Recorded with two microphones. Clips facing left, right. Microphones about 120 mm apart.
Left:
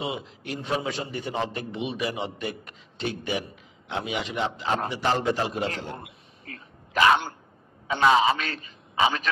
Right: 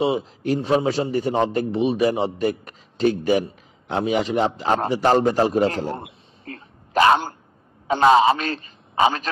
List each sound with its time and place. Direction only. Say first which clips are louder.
0.0 s a man's voice: right 11 dB; 35° right (ahead or behind)
5.9 s a sound: right 6 dB; 30° right (ahead or behind)
7.9 s a man's voice: right 5 dB; 35° right (ahead or behind)